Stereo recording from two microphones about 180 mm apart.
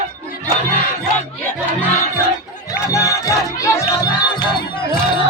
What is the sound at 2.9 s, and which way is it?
Music, 20° left (ahead or behind).